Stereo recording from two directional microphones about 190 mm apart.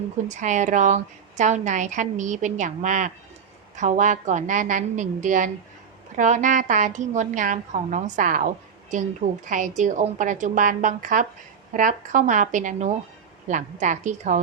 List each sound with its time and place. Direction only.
0.3 s a woman's voice: 40° right (ahead or behind)